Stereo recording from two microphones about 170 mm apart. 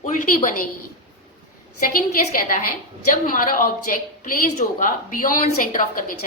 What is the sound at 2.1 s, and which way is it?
A woman's voice, 55° left (ahead or behind).